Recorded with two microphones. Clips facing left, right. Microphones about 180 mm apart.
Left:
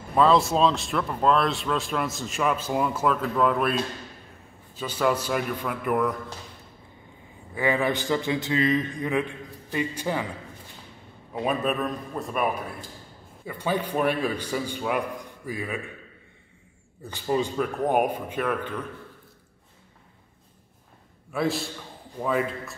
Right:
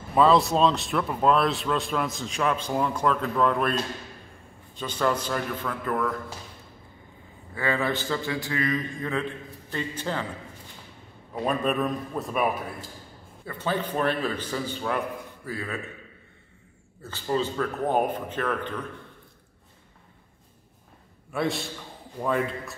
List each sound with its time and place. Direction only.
0.1 s speech: centre (ahead or behind); by 6.1 s 15° left (ahead or behind)
7.5 s speech: 15° left (ahead or behind)
11.3 s speech: 5° left (ahead or behind)
13.5 s speech: 10° left (ahead or behind)
17.0 s speech: 15° left (ahead or behind)
21.3 s a man's voice: centre (ahead or behind)